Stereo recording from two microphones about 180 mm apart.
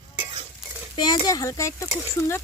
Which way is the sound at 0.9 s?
25° left (ahead or behind).